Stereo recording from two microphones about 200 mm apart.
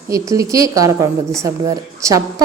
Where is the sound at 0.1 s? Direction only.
15° right (ahead or behind).